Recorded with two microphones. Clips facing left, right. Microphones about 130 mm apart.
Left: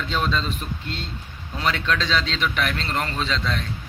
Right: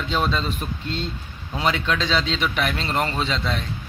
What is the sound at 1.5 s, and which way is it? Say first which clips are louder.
A man's voice: right 1 dB; 10° right (ahead or behind).